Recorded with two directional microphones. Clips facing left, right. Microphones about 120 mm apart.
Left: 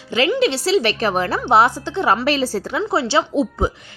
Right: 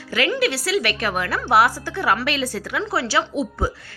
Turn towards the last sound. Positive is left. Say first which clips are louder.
# left 4 dB
turn(degrees=25)  # may be behind; listen again after turning